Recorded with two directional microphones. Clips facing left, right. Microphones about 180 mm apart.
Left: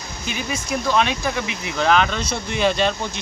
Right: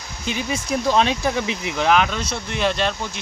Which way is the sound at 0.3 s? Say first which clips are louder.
Right 2 dB; 30° right (ahead or behind).